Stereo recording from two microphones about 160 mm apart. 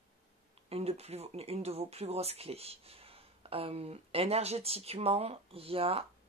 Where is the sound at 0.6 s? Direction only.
40° right (ahead or behind).